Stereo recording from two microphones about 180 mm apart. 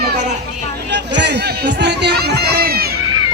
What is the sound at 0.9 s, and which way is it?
Speech, 75° right (ahead or behind).